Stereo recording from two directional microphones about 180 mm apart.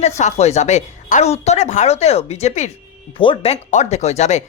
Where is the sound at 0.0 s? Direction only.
40° left (ahead or behind).